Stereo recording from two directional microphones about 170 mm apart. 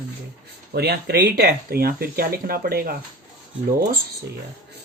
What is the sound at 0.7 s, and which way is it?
Speech, 70° right (ahead or behind).